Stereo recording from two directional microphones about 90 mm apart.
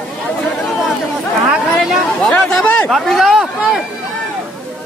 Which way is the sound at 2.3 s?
15° left (ahead or behind).